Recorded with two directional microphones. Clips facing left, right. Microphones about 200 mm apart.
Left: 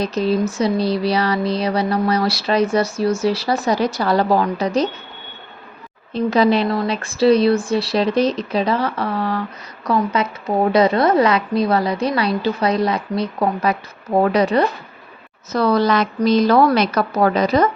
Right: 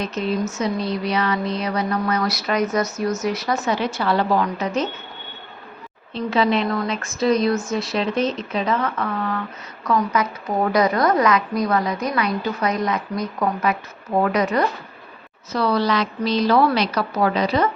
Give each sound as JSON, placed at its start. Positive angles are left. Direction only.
{"t": 0.0, "sound": "a woman's voice", "side_deg": 35}
{"t": 6.1, "sound": "a woman's voice", "side_deg": 40}
{"t": 15.5, "sound": "a woman's voice", "side_deg": 45}